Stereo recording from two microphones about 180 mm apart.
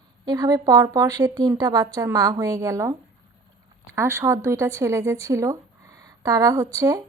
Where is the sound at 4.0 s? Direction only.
15° right (ahead or behind).